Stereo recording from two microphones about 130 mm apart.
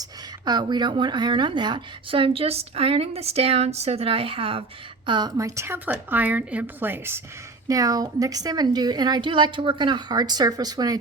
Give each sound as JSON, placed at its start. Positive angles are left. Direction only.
{"t": 0.0, "sound": "a woman's voice", "side_deg": -30}
{"t": 5.4, "sound": "a woman's voice", "side_deg": -25}
{"t": 7.7, "sound": "a woman's voice", "side_deg": -30}